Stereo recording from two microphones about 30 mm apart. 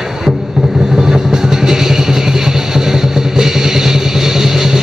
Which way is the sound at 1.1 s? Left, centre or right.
Centre.